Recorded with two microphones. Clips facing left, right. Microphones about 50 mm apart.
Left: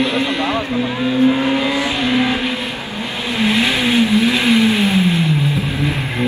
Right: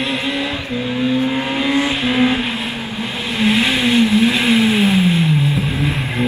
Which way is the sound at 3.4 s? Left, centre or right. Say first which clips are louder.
Right 1 dB; centre.